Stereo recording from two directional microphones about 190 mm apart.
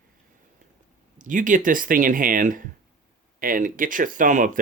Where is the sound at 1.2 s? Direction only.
45° right (ahead or behind).